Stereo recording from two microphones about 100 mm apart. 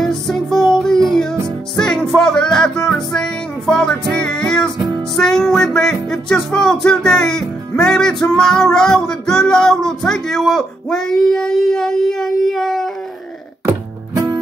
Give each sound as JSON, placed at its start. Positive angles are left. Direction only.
{"t": 0.0, "sound": "music", "side_deg": 0}
{"t": 13.7, "sound": "music", "side_deg": -35}